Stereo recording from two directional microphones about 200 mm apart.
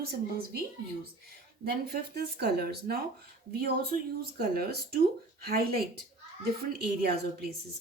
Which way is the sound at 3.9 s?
40° right (ahead or behind).